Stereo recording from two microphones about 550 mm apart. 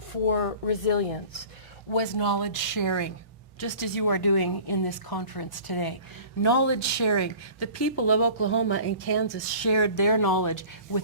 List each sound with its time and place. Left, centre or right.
0.3 s speech: left
1.9 s a woman's voice: left
6.4 s speech: left